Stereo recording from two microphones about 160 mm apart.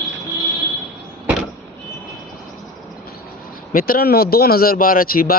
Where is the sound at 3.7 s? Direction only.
65° left (ahead or behind).